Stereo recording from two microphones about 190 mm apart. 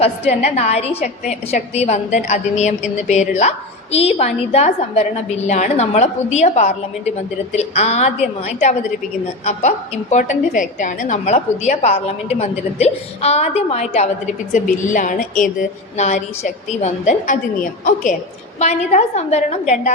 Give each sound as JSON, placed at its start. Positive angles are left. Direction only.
{"t": 0.0, "sound": "a woman's voice", "side_deg": 35}